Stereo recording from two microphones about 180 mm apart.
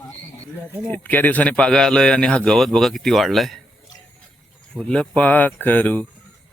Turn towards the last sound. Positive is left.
turn(degrees=10)  # may be behind; listen again after turning